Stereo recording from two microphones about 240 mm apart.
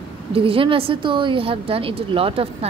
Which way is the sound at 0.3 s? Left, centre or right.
Right.